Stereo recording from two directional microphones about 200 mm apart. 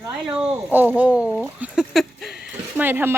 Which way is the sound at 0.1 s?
5° right (ahead or behind).